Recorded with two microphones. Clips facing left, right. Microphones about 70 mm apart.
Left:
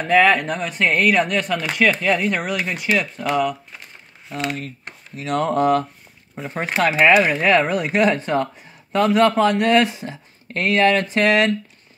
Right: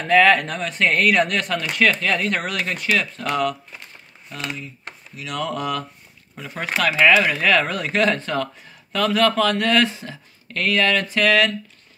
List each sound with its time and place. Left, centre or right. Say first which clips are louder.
0.0 s speech: even; centre
4.4 s speech: left 5 dB; left